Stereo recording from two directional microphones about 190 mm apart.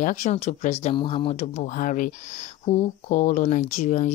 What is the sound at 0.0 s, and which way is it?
Speech, 40° left (ahead or behind).